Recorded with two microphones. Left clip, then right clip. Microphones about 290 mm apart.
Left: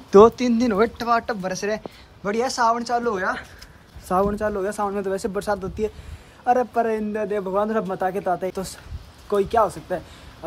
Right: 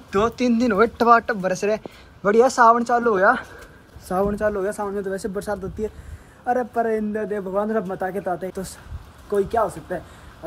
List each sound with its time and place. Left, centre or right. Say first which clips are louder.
0.1 s a man's voice: left 7 dB; centre
5.2 s a man's voice: left 2 dB; centre
6.4 s a man's voice: left 2 dB; centre